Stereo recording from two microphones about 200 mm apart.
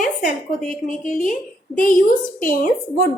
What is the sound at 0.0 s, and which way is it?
A woman's voice, 40° left (ahead or behind).